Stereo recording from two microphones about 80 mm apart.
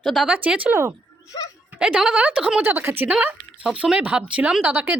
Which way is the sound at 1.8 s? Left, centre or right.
Centre.